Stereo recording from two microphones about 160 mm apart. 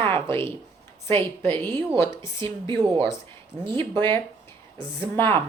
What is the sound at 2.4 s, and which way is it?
Speech, 30° right (ahead or behind).